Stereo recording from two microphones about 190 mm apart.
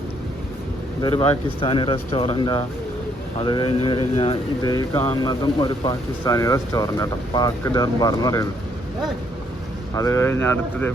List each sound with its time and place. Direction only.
1.0 s speech: 30° left (ahead or behind)
9.9 s speech: 15° left (ahead or behind)